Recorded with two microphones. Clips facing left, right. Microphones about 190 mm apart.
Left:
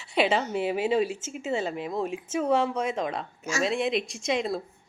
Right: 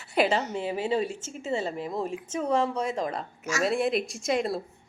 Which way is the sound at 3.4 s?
30° left (ahead or behind).